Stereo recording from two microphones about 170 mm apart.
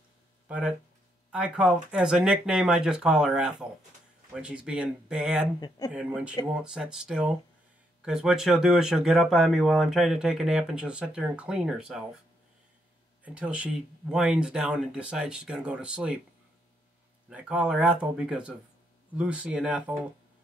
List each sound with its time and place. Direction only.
0.5 s speech: 5° right (ahead or behind)
13.2 s speech: 5° right (ahead or behind)
17.3 s speech: 5° right (ahead or behind)